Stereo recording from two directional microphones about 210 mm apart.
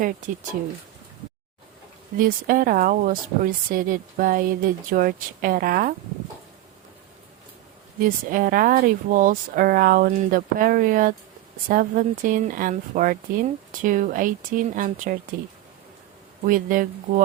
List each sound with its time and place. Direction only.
2.1 s speech: 40° right (ahead or behind)
8.0 s speech: 40° right (ahead or behind)
16.5 s speech: 40° right (ahead or behind)